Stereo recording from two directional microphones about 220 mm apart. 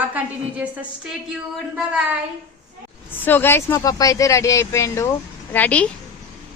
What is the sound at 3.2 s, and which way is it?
Speech, 10° left (ahead or behind).